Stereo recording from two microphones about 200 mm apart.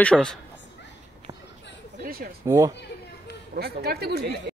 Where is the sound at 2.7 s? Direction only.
60° left (ahead or behind).